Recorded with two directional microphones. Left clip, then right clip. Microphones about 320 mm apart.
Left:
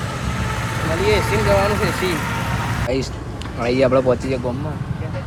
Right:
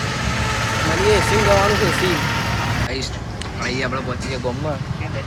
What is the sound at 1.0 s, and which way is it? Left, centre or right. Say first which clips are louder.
Speech: right 1 dB; right.